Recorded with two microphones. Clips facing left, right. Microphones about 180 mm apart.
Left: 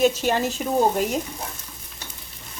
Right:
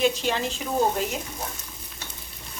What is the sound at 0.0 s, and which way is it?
Speech, 45° left (ahead or behind).